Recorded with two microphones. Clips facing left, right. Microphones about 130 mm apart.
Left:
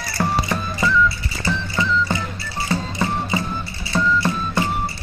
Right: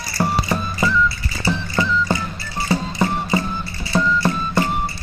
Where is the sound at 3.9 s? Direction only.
Centre (ahead or behind).